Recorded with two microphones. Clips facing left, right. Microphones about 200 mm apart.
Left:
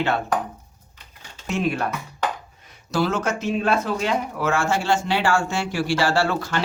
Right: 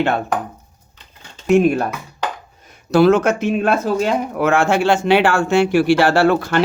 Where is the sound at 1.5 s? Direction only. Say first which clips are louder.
Right 10 dB; 50° right (ahead or behind).